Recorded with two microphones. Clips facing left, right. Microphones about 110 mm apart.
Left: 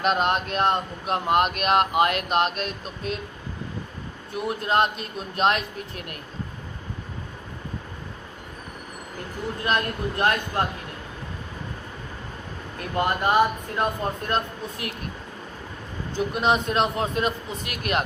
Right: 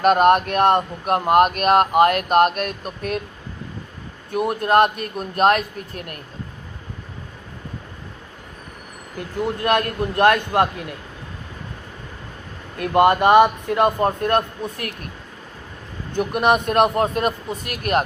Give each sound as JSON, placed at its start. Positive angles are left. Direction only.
{"t": 0.0, "sound": "speech", "side_deg": -50}
{"t": 4.3, "sound": "speech", "side_deg": -55}
{"t": 9.6, "sound": "a man's voice", "side_deg": -60}
{"t": 12.8, "sound": "a man's voice", "side_deg": -70}
{"t": 16.1, "sound": "speech", "side_deg": -60}